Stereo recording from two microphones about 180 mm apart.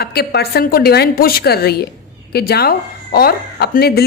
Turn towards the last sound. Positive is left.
turn(degrees=60)  # may be behind; listen again after turning